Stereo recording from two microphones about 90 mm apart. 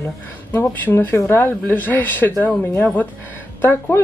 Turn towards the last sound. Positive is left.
turn(degrees=25)  # may be behind; listen again after turning